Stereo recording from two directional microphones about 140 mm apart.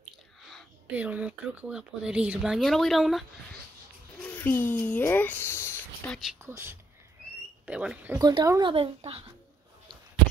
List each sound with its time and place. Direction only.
0.9 s speech: 10° right (ahead or behind)
4.2 s a sound: 10° left (ahead or behind)
6.4 s speech: 20° right (ahead or behind)
7.6 s speech: 10° right (ahead or behind)
8.1 s speech: 30° right (ahead or behind)
8.7 s a child's voice: 40° right (ahead or behind)